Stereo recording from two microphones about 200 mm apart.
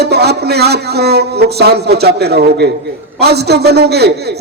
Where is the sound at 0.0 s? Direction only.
55° right (ahead or behind).